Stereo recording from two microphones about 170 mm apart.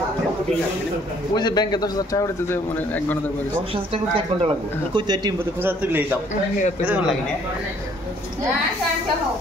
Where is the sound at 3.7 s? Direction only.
35° right (ahead or behind).